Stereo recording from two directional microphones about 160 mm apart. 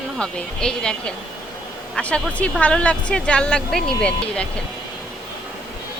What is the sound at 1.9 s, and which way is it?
Speech, 5° left (ahead or behind).